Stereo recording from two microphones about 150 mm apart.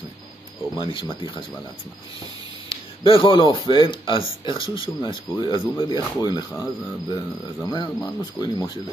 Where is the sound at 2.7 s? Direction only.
40° left (ahead or behind).